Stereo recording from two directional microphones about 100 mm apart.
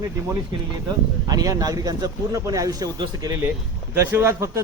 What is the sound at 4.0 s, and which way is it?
Speech, 25° right (ahead or behind).